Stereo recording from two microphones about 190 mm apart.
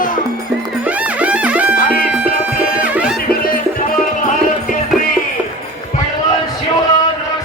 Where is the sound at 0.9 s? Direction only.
5° right (ahead or behind).